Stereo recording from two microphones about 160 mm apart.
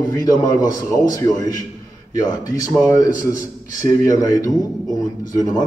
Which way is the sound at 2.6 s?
20° left (ahead or behind).